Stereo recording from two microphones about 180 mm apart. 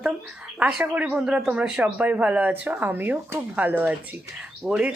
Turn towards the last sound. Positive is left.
turn(degrees=-5)  # may be behind; listen again after turning